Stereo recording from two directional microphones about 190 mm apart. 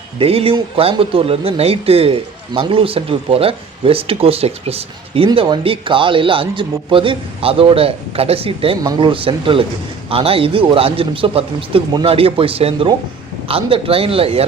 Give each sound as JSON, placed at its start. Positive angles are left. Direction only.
{"t": 0.2, "sound": "speech", "side_deg": -30}